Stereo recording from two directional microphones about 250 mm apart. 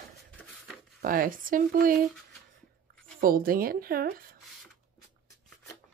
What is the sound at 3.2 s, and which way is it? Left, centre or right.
A woman's voice, right.